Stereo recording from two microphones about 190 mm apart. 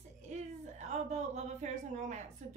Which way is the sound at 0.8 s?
35° right (ahead or behind).